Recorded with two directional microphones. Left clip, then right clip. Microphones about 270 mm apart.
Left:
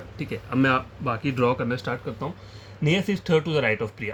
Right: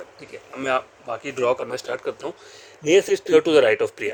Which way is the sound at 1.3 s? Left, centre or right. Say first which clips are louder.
Right 2 dB; right.